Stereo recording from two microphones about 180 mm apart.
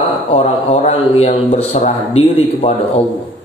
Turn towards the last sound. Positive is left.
turn(degrees=35)  # may be behind; listen again after turning